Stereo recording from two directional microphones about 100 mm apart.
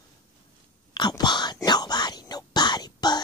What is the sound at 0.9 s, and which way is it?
Whispering, 45° left (ahead or behind).